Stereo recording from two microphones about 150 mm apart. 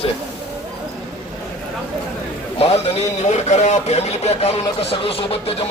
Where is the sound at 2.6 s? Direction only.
40° left (ahead or behind).